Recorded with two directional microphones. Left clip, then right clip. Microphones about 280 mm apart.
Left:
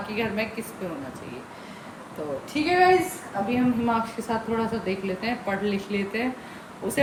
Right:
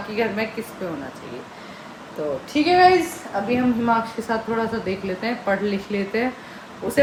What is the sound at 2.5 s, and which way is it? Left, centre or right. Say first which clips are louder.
Speech: right 6 dB; centre.